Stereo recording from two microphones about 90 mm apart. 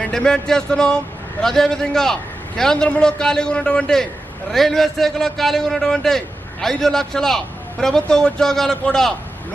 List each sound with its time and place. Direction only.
0.0 s a man's voice: 10° left (ahead or behind)